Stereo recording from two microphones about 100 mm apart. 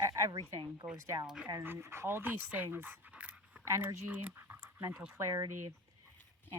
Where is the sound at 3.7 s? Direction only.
25° right (ahead or behind).